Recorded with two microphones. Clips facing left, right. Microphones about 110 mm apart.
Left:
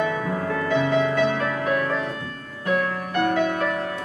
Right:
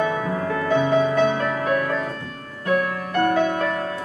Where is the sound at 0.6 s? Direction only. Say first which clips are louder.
Right 3 dB; 35° right (ahead or behind).